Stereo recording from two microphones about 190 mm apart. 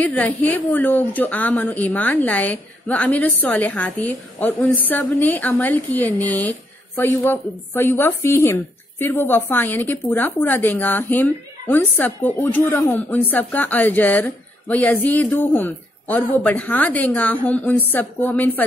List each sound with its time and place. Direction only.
0.0 s a woman's voice: 10° left (ahead or behind)